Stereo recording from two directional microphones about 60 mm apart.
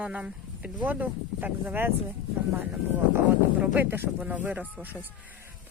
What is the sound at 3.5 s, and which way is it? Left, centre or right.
Speech, right.